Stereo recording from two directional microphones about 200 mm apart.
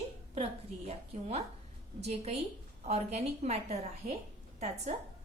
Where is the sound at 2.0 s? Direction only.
30° right (ahead or behind).